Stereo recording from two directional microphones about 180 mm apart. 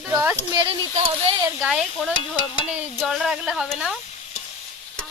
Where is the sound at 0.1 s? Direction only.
15° right (ahead or behind).